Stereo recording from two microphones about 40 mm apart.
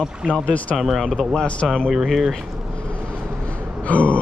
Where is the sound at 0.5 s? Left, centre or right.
Left.